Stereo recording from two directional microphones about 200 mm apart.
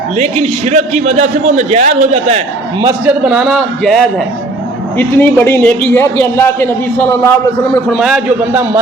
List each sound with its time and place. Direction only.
0.2 s a man's voice: 35° right (ahead or behind)
3.1 s a man's voice: 5° right (ahead or behind)
7.9 s a man's voice: centre (ahead or behind)